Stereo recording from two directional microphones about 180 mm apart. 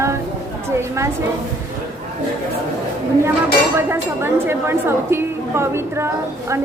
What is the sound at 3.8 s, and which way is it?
A woman's voice, 15° right (ahead or behind).